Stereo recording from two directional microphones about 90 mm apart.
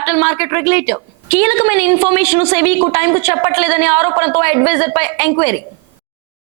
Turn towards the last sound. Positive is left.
turn(degrees=-30)  # may be behind; listen again after turning